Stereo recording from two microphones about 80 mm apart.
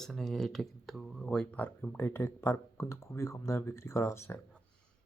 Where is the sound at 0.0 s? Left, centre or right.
Centre; by 2.0 s left.